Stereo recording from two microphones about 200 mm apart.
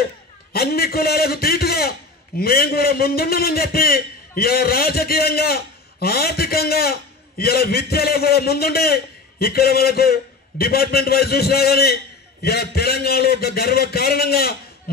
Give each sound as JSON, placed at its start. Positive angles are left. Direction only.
{"t": 0.5, "sound": "a man's voice", "side_deg": 50}